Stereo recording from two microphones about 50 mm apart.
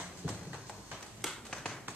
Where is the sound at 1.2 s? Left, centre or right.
Centre.